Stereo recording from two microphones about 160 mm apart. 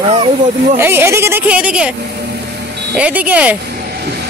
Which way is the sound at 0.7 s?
15° right (ahead or behind).